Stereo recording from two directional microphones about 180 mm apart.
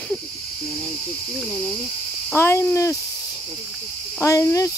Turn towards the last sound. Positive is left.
turn(degrees=15)  # may be behind; listen again after turning